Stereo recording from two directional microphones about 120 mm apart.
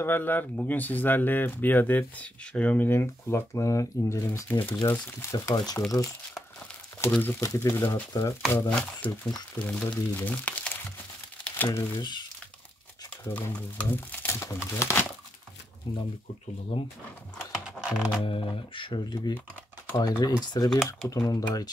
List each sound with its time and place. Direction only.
0.0 s speech: 15° left (ahead or behind)
7.1 s speech: 15° left (ahead or behind)
7.3 s speech: 25° left (ahead or behind)
8.5 s speech: 15° left (ahead or behind)
11.4 s crumpling: 15° left (ahead or behind)
12.0 s speech: 40° left (ahead or behind)
13.3 s speech: 10° left (ahead or behind)
15.8 s speech: 40° left (ahead or behind)
17.6 s music: 5° right (ahead or behind)
18.2 s speech: 45° left (ahead or behind); by 21.6 s 30° left (ahead or behind)